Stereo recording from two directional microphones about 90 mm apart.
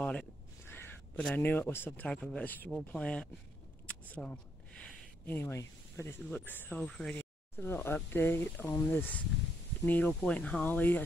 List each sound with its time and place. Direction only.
0.0 s speech: 10° left (ahead or behind)
0.7 s a sound: 25° left (ahead or behind)
1.2 s speech: 20° left (ahead or behind)
3.8 s single-lens reflex camera: 15° left (ahead or behind)
5.2 s speech: 25° left (ahead or behind); by 7.2 s 10° left (ahead or behind)
7.2 s speech: 25° left (ahead or behind)